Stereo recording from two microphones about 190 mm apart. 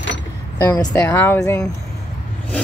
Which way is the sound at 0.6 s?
10° left (ahead or behind).